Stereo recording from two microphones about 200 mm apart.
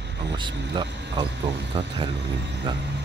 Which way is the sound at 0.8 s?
60° right (ahead or behind).